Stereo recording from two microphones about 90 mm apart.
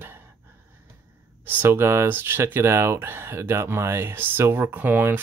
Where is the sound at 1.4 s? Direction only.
25° right (ahead or behind).